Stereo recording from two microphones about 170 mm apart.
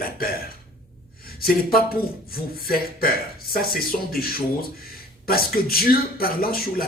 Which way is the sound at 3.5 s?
60° left (ahead or behind).